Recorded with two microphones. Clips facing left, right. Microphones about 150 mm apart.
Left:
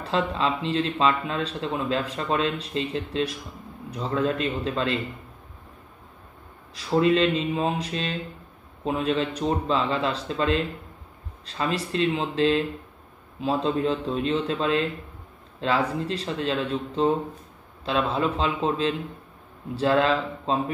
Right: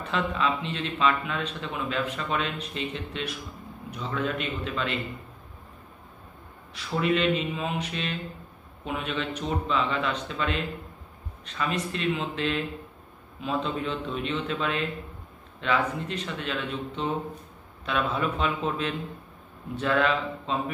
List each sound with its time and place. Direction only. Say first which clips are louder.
0.0 s speech: left 3 dB; 30° left (ahead or behind)
6.7 s speech: left 5 dB; 35° left (ahead or behind)